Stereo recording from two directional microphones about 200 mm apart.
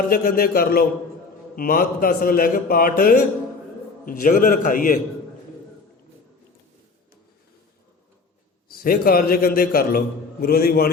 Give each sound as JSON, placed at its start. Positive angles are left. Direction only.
{"t": 0.1, "sound": "a man's voice", "side_deg": 50}
{"t": 8.8, "sound": "a man's voice", "side_deg": 45}